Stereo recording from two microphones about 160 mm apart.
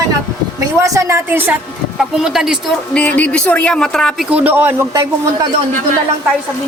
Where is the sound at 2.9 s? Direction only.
10° left (ahead or behind).